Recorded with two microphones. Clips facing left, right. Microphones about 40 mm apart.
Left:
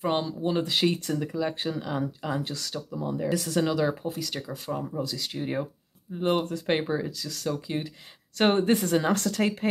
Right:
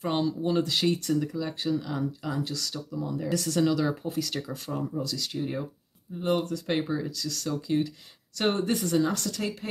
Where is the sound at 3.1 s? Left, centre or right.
Centre.